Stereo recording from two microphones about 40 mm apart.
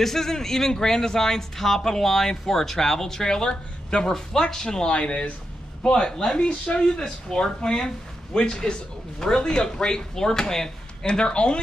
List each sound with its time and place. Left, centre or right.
0.0 s speech: centre